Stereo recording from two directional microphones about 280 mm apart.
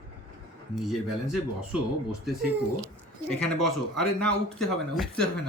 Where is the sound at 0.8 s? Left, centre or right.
Centre.